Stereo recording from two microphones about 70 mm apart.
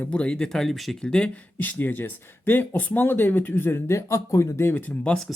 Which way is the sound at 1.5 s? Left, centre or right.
Left.